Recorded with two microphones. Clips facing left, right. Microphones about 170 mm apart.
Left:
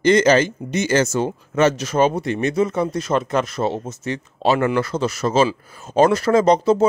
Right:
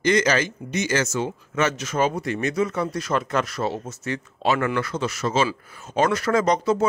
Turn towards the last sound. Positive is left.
turn(degrees=30)  # may be behind; listen again after turning